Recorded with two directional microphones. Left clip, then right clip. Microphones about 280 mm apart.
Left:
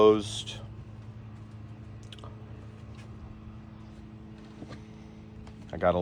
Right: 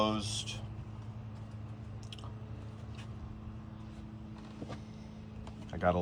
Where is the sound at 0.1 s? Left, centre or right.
Centre.